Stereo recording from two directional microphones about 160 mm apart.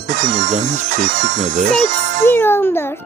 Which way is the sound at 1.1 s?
90° right.